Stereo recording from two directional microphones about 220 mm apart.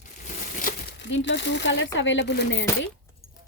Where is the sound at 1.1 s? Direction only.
55° left (ahead or behind).